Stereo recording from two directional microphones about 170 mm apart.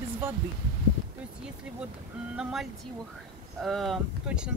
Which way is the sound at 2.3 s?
5° right (ahead or behind).